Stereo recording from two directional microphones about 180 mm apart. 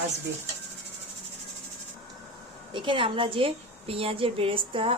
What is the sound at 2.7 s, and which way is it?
A woman's voice, 30° right (ahead or behind).